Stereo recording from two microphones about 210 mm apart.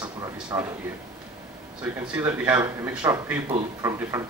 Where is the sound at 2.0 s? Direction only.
10° right (ahead or behind).